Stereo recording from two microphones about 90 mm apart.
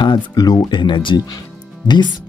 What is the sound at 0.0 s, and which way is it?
Speech, 55° left (ahead or behind).